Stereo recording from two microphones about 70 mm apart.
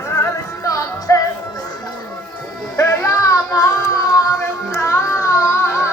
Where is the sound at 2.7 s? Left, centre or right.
Left.